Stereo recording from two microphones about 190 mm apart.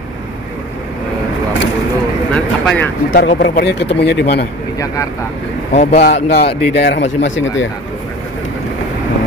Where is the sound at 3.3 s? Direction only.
60° left (ahead or behind).